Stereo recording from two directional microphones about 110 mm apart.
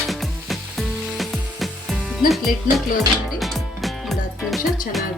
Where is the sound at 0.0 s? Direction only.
Centre (ahead or behind).